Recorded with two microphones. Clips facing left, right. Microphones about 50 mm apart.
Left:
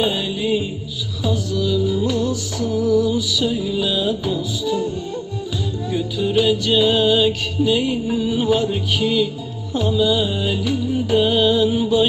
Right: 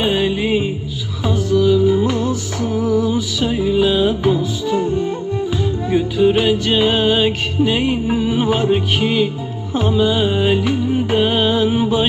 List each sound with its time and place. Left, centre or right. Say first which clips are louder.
0.0 s music: right 4 dB; right